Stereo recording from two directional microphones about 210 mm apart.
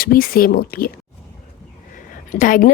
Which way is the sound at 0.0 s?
45° left (ahead or behind).